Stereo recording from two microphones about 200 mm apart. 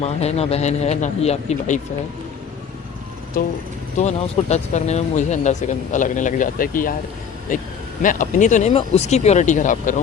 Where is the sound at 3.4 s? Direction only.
50° left (ahead or behind).